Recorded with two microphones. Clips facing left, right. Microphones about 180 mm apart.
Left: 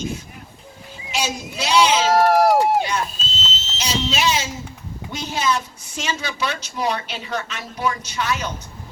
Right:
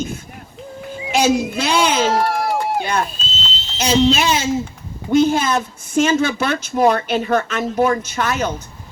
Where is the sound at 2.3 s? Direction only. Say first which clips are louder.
Left 6 dB; 80° left.